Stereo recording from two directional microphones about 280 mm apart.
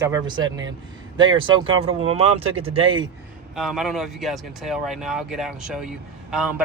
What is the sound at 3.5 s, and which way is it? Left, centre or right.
Speech, centre.